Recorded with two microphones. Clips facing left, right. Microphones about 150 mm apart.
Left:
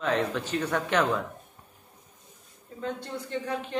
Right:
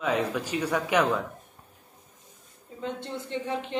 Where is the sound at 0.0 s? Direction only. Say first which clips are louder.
Even; 10° right (ahead or behind).